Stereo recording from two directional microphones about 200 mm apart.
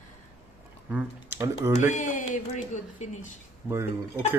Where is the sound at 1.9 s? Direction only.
40° left (ahead or behind).